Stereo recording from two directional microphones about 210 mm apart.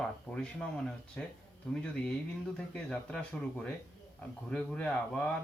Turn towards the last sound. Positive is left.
turn(degrees=5)  # may be behind; listen again after turning